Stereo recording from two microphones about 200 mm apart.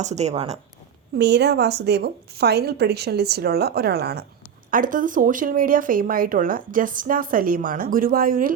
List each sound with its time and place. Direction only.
0.0 s speech: 35° right (ahead or behind)
1.2 s speech: 55° right (ahead or behind)
4.7 s speech: 40° right (ahead or behind)